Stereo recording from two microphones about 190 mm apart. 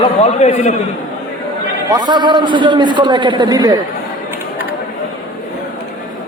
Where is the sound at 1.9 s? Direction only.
20° right (ahead or behind).